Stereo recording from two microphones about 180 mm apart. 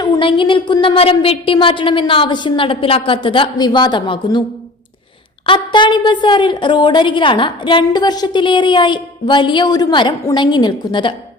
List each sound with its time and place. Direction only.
0.0 s a woman's voice: 25° left (ahead or behind)
5.5 s a woman's voice: 25° left (ahead or behind)